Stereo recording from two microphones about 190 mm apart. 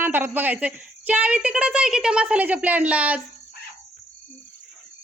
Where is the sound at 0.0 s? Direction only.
10° right (ahead or behind).